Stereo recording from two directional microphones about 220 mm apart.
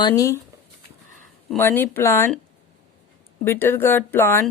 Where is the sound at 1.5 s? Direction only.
10° left (ahead or behind).